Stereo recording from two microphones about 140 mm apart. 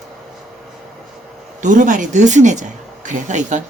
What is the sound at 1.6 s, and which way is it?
Speech, 65° right (ahead or behind).